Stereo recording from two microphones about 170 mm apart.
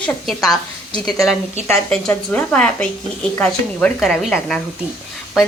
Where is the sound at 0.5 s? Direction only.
25° left (ahead or behind).